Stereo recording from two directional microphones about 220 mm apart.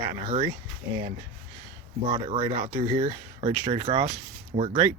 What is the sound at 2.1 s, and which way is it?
Speech, 25° right (ahead or behind).